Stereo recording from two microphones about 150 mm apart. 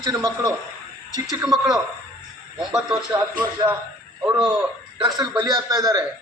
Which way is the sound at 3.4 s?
20° right (ahead or behind).